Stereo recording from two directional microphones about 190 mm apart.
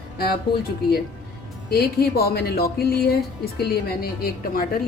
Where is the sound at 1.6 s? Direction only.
55° left (ahead or behind).